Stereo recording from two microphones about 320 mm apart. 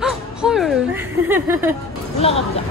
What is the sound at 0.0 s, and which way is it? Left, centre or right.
Music, centre.